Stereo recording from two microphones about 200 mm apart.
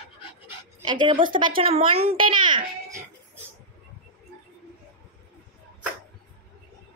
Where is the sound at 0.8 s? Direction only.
25° right (ahead or behind).